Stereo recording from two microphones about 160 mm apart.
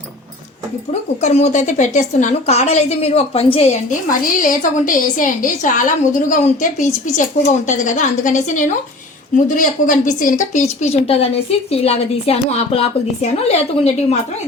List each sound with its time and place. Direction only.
1.2 s a woman's voice: 45° left (ahead or behind)
4.2 s a woman's voice: 60° left (ahead or behind); by 14.2 s 45° left (ahead or behind)